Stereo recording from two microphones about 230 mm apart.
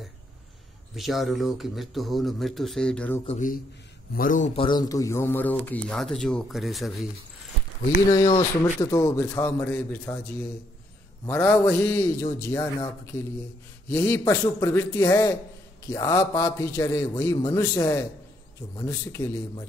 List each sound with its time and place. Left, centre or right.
0.9 s speech: centre
3.3 s speech: left
4.6 s a man's voice: centre
8.6 s a man's voice: centre
11.2 s a man's voice: centre